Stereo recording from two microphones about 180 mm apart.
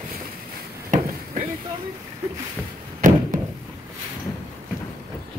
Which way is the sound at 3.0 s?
50° right (ahead or behind).